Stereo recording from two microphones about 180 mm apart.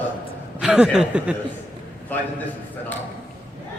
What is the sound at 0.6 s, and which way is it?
Speech, 5° right (ahead or behind).